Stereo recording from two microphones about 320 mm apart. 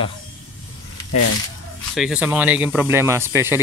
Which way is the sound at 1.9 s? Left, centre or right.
Centre.